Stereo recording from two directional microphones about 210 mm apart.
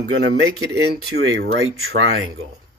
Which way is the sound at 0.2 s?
50° right (ahead or behind).